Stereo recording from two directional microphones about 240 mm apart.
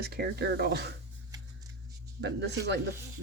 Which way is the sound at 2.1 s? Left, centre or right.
Right.